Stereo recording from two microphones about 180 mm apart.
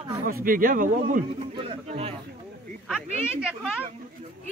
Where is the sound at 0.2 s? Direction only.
50° right (ahead or behind).